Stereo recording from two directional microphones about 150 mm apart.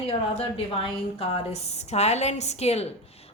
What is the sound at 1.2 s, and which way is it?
A woman's voice, 40° left (ahead or behind).